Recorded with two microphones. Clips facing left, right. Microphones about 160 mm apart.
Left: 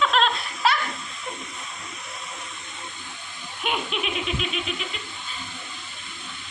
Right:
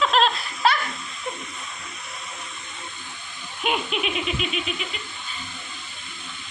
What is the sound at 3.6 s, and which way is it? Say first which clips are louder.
Laughter: right 2 dB; centre (ahead or behind).